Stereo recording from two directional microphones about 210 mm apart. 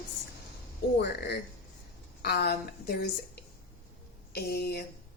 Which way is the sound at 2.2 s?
50° left (ahead or behind).